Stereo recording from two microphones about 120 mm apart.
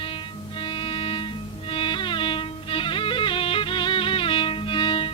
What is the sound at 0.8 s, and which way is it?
Music, 45° left (ahead or behind).